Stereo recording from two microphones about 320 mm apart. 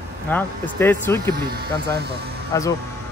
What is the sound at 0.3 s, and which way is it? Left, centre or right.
A man's voice, centre.